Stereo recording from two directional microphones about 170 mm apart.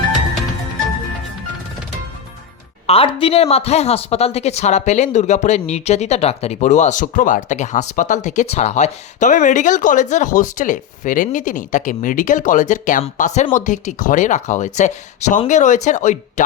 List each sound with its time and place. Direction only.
2.8 s speech: 35° left (ahead or behind)